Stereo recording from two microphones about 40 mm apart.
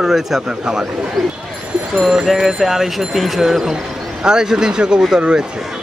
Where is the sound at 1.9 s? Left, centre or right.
Centre; by 5.4 s right.